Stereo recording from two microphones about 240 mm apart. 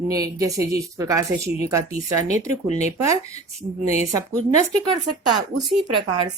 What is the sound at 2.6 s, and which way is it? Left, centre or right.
Speech, left.